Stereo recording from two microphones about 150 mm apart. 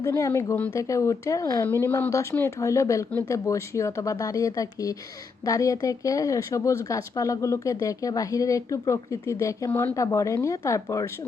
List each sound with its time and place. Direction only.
0.0 s speech: 20° left (ahead or behind)